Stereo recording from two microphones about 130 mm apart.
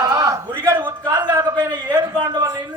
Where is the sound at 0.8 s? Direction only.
35° right (ahead or behind).